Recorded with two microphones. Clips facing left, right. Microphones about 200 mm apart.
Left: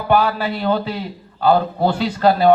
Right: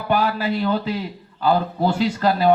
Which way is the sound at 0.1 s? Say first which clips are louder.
Left 3 dB; 35° left (ahead or behind).